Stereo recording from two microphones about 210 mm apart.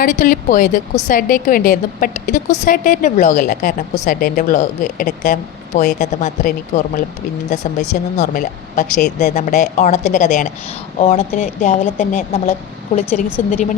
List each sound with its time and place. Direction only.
0.0 s a woman's voice: 40° left (ahead or behind)